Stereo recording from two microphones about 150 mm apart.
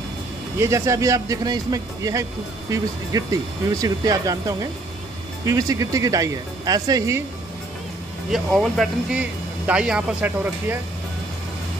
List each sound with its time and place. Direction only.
0.6 s speech: 20° right (ahead or behind)
8.3 s speech: centre (ahead or behind)